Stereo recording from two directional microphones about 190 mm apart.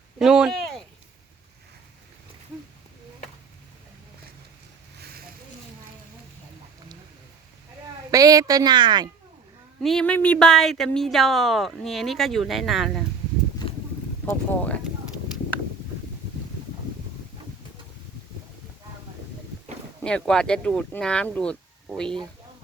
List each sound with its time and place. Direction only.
0.2 s a sound: centre (ahead or behind)
8.1 s speech: 20° right (ahead or behind)
9.8 s speech: 5° left (ahead or behind)
14.3 s speech: 10° left (ahead or behind)
20.0 s speech: 5° left (ahead or behind)